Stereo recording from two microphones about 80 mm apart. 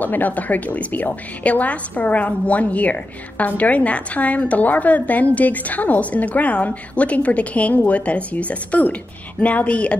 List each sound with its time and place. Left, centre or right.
0.0 s a woman's voice: left